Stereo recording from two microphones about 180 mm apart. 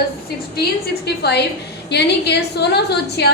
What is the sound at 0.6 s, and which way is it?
A woman's voice, 65° left (ahead or behind).